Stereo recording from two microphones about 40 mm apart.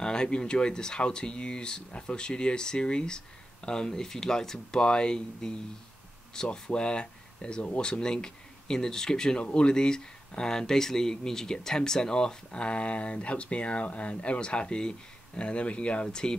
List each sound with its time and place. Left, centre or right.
0.0 s speech: centre
16.1 s speech: centre